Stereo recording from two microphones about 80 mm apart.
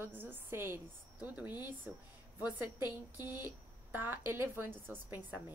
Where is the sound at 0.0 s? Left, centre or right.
Right.